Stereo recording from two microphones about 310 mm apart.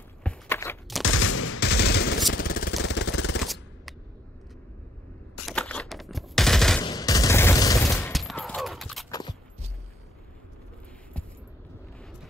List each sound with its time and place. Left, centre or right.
0.2 s a sound: centre
1.1 s machine gun: left
2.3 s jackhammer: left
2.8 s vehicle: left
3.4 s machine gun: centre
5.5 s a sound: centre
6.8 s fusillade: centre